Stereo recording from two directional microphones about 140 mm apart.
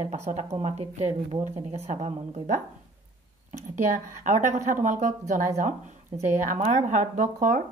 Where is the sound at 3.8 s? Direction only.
60° right (ahead or behind).